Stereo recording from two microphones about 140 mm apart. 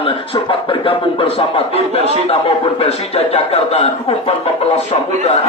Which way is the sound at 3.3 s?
45° left (ahead or behind).